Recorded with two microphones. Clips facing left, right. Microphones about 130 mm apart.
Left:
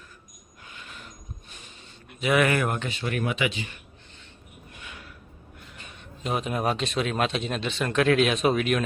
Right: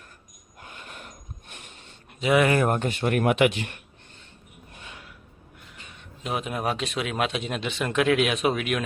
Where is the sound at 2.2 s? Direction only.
25° right (ahead or behind).